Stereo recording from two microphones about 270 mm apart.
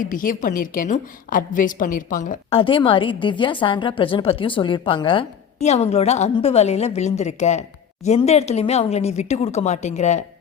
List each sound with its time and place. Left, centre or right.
0.0 s a woman's voice: left